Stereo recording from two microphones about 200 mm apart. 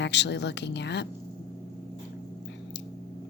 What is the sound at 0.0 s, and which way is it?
Speech, 60° left (ahead or behind).